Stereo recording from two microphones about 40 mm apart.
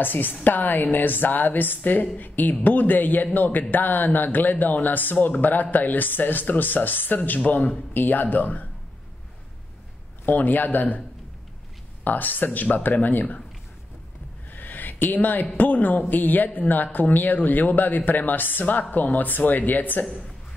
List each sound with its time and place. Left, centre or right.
0.0 s speech: left
10.2 s speech: left
12.0 s speech: left
14.5 s a sound: left
15.5 s speech: left